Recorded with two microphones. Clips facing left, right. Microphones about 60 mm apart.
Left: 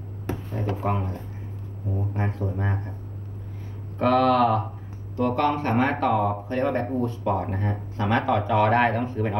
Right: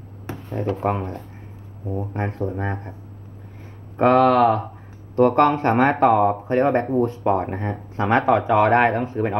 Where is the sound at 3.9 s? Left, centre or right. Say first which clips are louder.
Right 4 dB; right.